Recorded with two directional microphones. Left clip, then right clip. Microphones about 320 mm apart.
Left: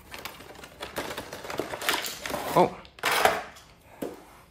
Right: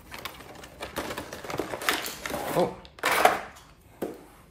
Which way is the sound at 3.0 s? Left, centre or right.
Centre.